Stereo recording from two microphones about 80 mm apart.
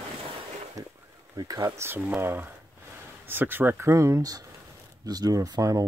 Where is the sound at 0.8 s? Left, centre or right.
Right.